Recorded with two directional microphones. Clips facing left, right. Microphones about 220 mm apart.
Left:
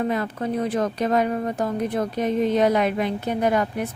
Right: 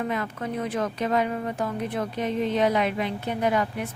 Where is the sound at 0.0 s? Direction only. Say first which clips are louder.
Left 4 dB; 35° left (ahead or behind).